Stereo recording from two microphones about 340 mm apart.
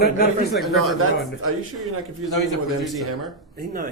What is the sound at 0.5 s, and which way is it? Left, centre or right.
Speech, centre.